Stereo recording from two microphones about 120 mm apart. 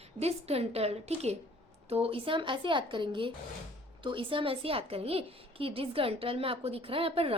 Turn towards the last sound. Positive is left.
turn(degrees=-50)  # may be behind; listen again after turning